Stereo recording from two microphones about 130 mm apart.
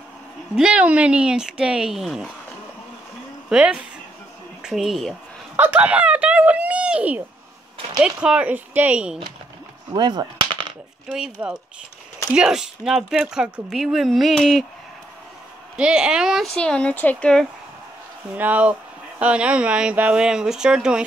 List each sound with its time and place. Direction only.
0.6 s speech: 10° right (ahead or behind)
3.4 s a woman's voice: 10° right (ahead or behind)
5.6 s a sound: 10° right (ahead or behind)
8.0 s speech: 10° right (ahead or behind)
9.9 s speech: 35° right (ahead or behind)
11.1 s speech: 5° right (ahead or behind)
15.8 s speech: 5° right (ahead or behind)
18.4 s speech: 10° right (ahead or behind)